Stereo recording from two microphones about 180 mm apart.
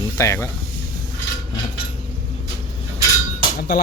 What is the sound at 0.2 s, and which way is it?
Speech, 15° left (ahead or behind).